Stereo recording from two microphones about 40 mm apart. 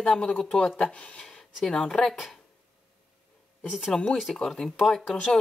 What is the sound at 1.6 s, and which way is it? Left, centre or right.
Speech, centre.